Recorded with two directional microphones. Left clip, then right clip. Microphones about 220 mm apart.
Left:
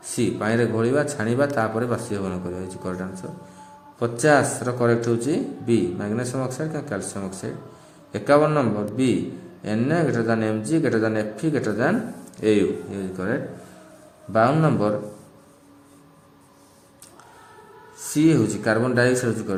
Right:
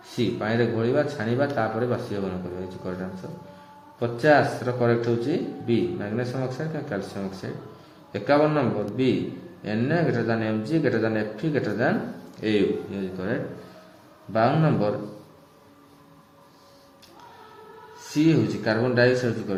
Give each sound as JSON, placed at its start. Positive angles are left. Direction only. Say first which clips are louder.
{"t": 0.2, "sound": "a man's voice", "louder": "left 2 dB", "side_deg": 55}
{"t": 4.0, "sound": "a man's voice", "louder": "left 1 dB", "side_deg": 55}
{"t": 9.6, "sound": "a man's voice", "louder": "left 2 dB", "side_deg": 55}
{"t": 14.3, "sound": "a man's voice", "louder": "left 3 dB", "side_deg": 50}
{"t": 18.0, "sound": "a man's voice", "louder": "left 3 dB", "side_deg": 50}